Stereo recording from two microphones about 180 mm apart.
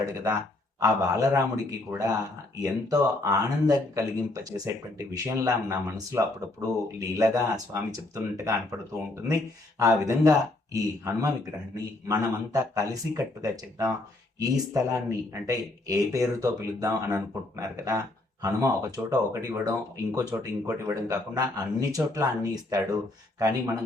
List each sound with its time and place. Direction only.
0.0 s speech: 15° right (ahead or behind)
23.4 s speech: 20° right (ahead or behind)